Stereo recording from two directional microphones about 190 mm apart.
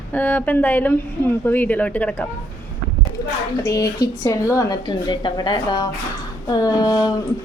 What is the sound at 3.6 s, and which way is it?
Speech, 20° left (ahead or behind).